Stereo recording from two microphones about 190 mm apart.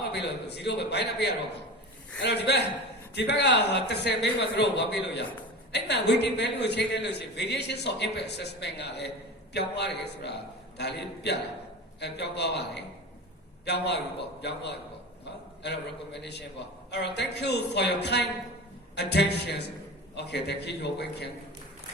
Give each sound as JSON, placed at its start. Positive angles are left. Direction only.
{"t": 0.0, "sound": "a man's voice", "side_deg": 60}